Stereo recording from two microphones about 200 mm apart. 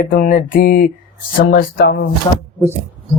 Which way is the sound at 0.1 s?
45° left (ahead or behind).